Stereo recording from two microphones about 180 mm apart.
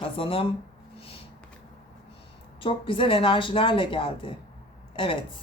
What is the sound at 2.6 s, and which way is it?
Speech, 30° left (ahead or behind).